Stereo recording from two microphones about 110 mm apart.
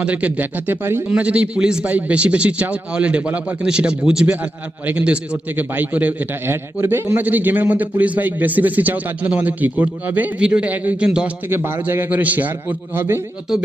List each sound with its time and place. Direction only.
0.0 s a man's voice: 10° right (ahead or behind)
11.4 s a man's voice: 20° right (ahead or behind)